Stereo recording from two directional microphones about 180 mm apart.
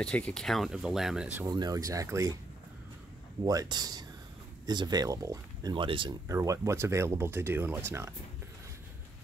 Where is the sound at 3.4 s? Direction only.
20° right (ahead or behind).